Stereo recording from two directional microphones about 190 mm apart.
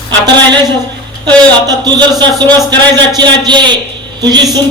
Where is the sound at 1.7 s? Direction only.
20° right (ahead or behind).